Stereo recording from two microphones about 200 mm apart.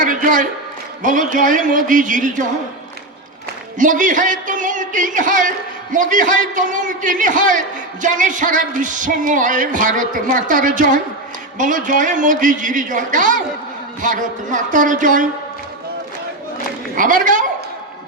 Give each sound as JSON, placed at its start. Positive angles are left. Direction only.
{"t": 0.0, "sound": "a sound", "side_deg": -40}
{"t": 1.0, "sound": "speech", "side_deg": -40}
{"t": 3.8, "sound": "speech", "side_deg": -40}
{"t": 17.0, "sound": "speech", "side_deg": -40}